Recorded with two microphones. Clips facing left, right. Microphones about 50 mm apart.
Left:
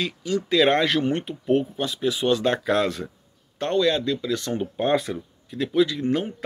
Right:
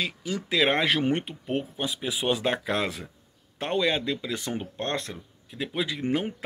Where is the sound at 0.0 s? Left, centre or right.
Centre.